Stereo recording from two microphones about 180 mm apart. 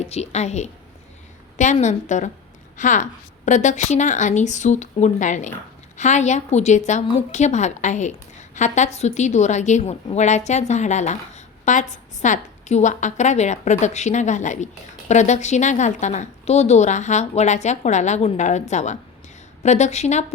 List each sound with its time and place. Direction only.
0.0 s a woman's voice: 35° left (ahead or behind)